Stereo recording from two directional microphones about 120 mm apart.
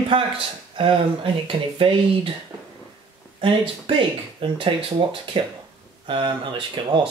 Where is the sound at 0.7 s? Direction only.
45° right (ahead or behind).